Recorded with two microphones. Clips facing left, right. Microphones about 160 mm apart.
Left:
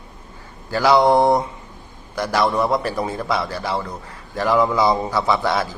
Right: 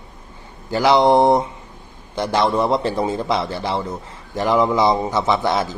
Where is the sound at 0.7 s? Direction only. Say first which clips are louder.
Right 1 dB; 20° right (ahead or behind).